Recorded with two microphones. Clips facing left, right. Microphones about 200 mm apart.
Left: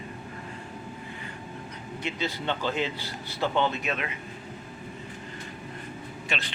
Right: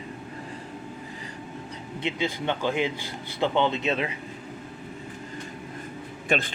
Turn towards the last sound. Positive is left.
turn(degrees=-50)  # may be behind; listen again after turning